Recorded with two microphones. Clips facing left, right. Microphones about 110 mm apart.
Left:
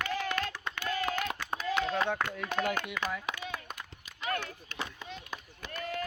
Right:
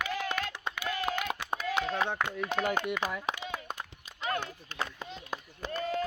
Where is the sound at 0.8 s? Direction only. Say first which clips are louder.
Left 1 dB; 15° right (ahead or behind).